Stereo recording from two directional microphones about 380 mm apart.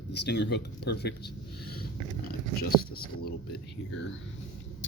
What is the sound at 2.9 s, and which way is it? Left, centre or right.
Speech, left.